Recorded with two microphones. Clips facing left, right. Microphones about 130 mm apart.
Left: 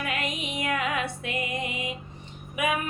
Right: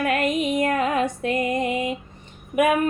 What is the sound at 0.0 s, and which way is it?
Music, 50° right (ahead or behind).